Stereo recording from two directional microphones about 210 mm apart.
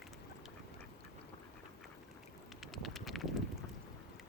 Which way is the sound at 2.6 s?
Centre (ahead or behind).